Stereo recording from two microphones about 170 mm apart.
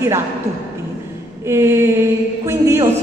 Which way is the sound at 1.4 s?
15° right (ahead or behind).